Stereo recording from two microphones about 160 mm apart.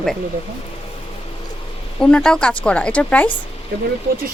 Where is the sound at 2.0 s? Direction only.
5° left (ahead or behind).